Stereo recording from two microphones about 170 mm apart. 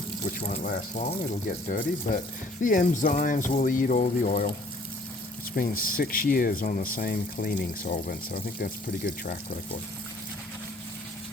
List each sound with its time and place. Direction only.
0.3 s speech: 55° left (ahead or behind)
5.5 s speech: 55° left (ahead or behind)